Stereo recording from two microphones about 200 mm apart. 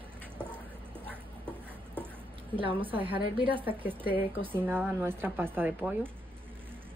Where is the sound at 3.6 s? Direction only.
10° right (ahead or behind).